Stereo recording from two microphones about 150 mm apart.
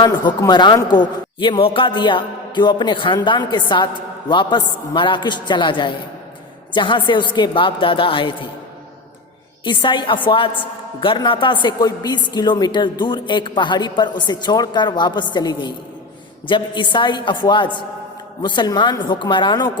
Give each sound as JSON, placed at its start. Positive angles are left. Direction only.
{"t": 0.0, "sound": "a woman's voice", "side_deg": 30}
{"t": 9.6, "sound": "a woman's voice", "side_deg": 30}